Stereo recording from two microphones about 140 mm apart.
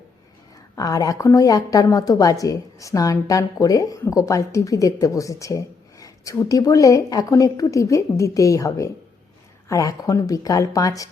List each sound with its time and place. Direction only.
0.8 s a woman's voice: 25° left (ahead or behind)